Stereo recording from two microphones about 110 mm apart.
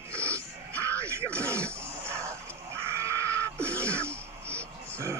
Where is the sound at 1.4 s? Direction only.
25° right (ahead or behind).